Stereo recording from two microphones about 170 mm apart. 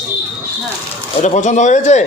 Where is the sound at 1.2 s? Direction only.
45° left (ahead or behind).